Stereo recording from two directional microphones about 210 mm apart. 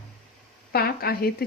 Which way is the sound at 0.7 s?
45° left (ahead or behind).